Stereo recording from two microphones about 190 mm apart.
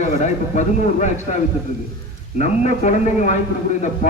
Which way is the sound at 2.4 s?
40° left (ahead or behind).